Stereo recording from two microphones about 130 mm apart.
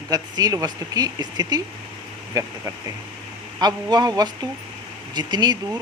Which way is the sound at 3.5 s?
30° right (ahead or behind).